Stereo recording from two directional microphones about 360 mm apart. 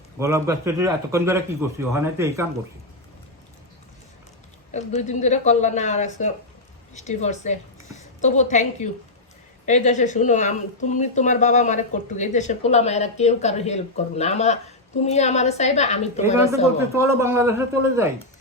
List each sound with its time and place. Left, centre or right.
0.2 s a man's voice: centre
4.7 s speech: centre
16.9 s a man's voice: centre